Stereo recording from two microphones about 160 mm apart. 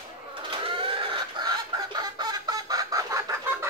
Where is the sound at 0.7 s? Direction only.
30° right (ahead or behind).